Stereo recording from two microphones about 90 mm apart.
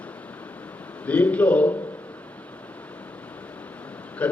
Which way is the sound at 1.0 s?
15° left (ahead or behind).